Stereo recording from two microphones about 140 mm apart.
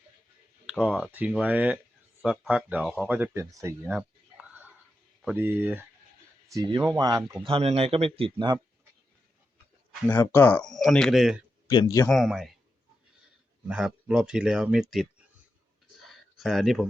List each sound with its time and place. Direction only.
0.7 s speech: 5° right (ahead or behind)
3.4 s speech: 25° right (ahead or behind)
5.4 s speech: 15° right (ahead or behind)
6.7 s speech: 30° right (ahead or behind)
7.4 s speech: 45° right (ahead or behind)
10.1 s speech: 15° left (ahead or behind)
10.7 s speech: centre (ahead or behind)
11.7 s speech: 25° left (ahead or behind)
12.1 s speech: centre (ahead or behind)
13.7 s speech: 5° right (ahead or behind)
16.0 s a sound: centre (ahead or behind)